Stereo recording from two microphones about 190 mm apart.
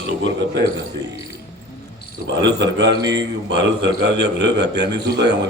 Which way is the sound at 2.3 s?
60° right (ahead or behind).